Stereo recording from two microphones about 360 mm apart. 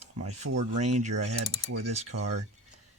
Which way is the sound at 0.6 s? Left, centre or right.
Centre.